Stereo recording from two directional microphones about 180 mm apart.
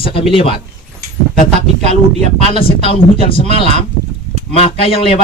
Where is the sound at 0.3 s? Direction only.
30° left (ahead or behind).